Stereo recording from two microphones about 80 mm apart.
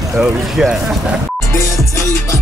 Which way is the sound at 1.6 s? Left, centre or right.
Left.